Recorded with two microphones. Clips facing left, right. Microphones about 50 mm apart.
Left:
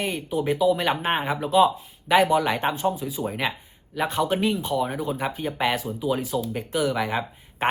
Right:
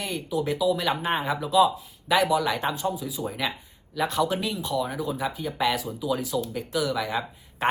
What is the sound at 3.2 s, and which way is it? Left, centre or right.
Speech, left.